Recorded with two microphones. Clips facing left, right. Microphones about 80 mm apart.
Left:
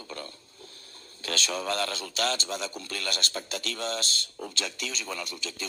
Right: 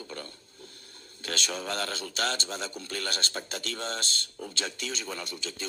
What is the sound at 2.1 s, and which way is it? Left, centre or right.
Speech, right.